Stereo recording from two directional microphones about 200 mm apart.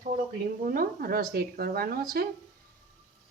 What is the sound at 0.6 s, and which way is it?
Speech, 45° right (ahead or behind).